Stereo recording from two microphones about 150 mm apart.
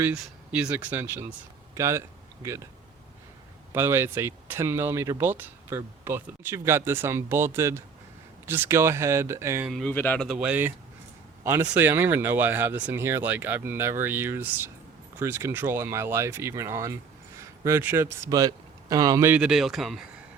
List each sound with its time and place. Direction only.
0.0 s speech: 5° right (ahead or behind)
3.7 s speech: 15° right (ahead or behind)
9.6 s a man's voice: centre (ahead or behind)
10.2 s speech: 10° right (ahead or behind); by 19.3 s 25° right (ahead or behind)
19.3 s speech: 5° right (ahead or behind)